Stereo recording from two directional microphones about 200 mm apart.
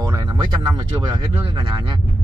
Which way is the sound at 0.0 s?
20° right (ahead or behind).